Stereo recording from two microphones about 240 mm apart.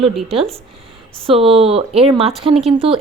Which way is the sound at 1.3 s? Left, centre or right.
Right.